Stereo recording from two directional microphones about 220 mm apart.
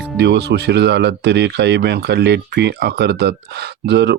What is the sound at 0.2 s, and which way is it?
Speech, 50° right (ahead or behind).